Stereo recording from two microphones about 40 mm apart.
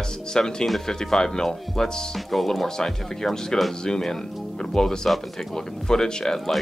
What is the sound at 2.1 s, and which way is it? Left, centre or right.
Speech, centre.